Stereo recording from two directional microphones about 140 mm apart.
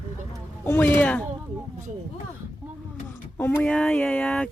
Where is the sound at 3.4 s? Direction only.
10° left (ahead or behind).